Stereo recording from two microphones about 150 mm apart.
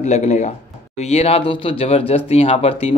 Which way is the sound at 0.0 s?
50° left (ahead or behind).